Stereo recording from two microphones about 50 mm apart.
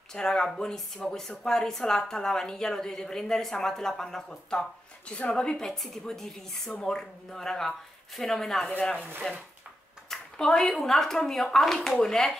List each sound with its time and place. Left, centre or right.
0.1 s speech: centre
8.6 s speech: left